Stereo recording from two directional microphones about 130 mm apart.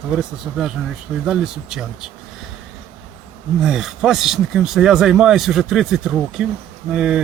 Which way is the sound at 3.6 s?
5° right (ahead or behind).